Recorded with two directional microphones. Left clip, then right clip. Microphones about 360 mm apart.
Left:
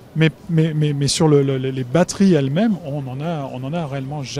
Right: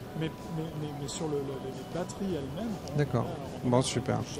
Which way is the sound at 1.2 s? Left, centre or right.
Left.